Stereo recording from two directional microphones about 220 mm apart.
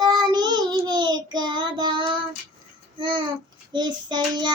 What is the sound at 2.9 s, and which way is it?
Babbling, 20° right (ahead or behind).